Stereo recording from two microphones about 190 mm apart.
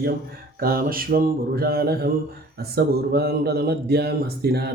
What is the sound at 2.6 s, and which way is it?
Speech, 55° right (ahead or behind).